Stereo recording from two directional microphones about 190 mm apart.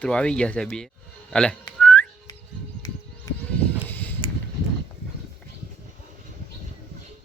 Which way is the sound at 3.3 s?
20° left (ahead or behind).